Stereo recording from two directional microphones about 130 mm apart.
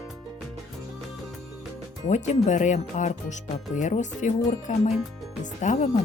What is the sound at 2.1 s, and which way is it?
Speech, 65° left (ahead or behind).